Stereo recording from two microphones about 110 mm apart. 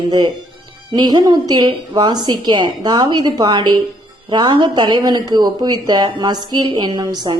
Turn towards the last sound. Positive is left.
turn(degrees=-40)  # may be behind; listen again after turning